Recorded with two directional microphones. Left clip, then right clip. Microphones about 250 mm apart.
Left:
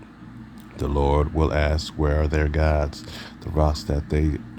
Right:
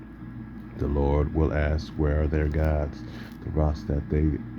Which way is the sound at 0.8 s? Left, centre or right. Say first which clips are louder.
Left 4 dB; left.